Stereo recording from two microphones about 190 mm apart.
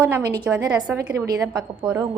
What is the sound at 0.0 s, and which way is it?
A woman's voice, 20° right (ahead or behind).